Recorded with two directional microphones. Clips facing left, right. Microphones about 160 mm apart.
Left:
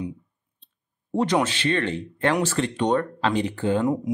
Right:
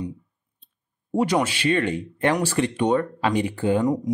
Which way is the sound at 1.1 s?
10° right (ahead or behind).